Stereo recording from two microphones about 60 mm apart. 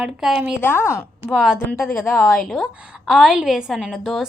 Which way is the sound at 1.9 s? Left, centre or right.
Left.